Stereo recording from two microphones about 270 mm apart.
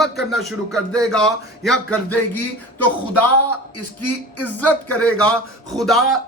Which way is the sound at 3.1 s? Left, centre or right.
Left.